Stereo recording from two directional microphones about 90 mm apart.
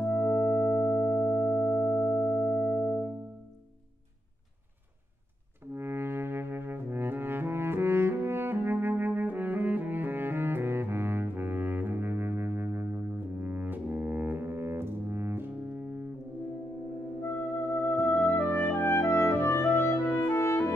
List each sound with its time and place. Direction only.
0.1 s music: 15° left (ahead or behind)
5.7 s music: 25° right (ahead or behind)
17.2 s music: 25° left (ahead or behind)